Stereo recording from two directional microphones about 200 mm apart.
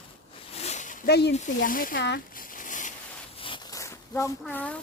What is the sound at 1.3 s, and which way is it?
Speech, 40° left (ahead or behind).